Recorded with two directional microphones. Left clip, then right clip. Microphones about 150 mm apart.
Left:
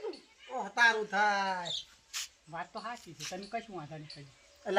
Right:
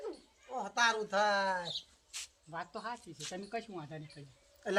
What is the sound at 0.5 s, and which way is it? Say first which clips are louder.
Speech: left 4 dB; 15° right (ahead or behind).